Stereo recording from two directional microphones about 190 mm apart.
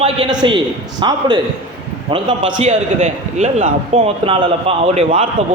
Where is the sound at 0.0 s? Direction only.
25° right (ahead or behind).